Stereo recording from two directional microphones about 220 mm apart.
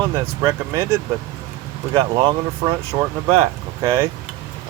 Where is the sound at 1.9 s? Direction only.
20° right (ahead or behind).